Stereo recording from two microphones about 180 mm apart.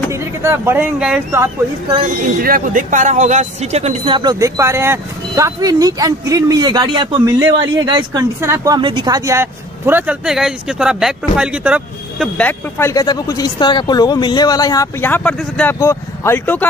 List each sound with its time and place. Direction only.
0.1 s speech: 15° right (ahead or behind)
1.3 s speech: 15° right (ahead or behind)
2.4 s speech: 50° right (ahead or behind); by 12.3 s 5° right (ahead or behind)
12.4 s speech: 10° left (ahead or behind)